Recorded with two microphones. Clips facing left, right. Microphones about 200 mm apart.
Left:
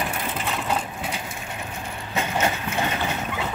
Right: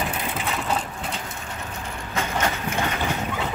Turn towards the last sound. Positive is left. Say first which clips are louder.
# even
turn(degrees=20)  # may be behind; listen again after turning